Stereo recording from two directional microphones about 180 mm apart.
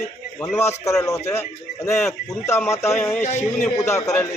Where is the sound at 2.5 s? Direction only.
15° left (ahead or behind).